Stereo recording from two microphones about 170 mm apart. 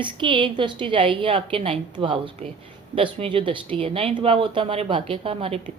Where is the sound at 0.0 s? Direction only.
30° right (ahead or behind).